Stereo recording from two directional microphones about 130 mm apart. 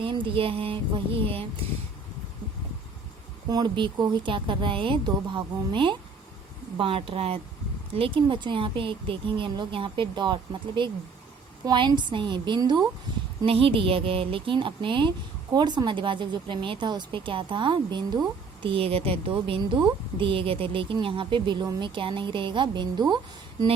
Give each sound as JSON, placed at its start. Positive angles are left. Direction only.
{"t": 0.0, "sound": "speech", "side_deg": -40}
{"t": 3.5, "sound": "speech", "side_deg": -35}
{"t": 13.4, "sound": "speech", "side_deg": -45}